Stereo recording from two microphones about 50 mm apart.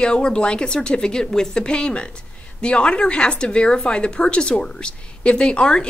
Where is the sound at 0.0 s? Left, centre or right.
Centre.